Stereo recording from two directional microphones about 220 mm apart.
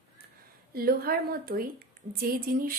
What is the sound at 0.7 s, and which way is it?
A woman's voice, 45° right (ahead or behind).